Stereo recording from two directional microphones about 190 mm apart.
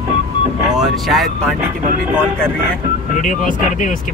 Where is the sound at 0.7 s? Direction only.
Centre (ahead or behind).